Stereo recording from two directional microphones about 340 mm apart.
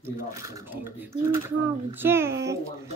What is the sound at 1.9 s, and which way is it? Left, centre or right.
Speech, centre.